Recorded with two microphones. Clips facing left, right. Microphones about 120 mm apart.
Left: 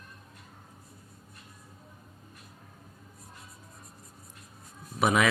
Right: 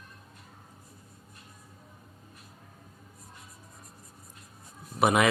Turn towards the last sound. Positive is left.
turn(degrees=-55)  # may be behind; listen again after turning